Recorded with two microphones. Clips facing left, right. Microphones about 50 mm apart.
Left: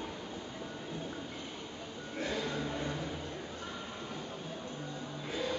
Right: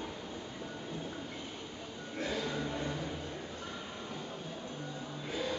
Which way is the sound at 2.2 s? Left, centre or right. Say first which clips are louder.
Even; centre.